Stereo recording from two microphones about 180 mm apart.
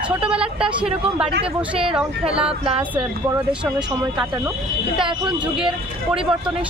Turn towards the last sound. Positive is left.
turn(degrees=-5)  # may be behind; listen again after turning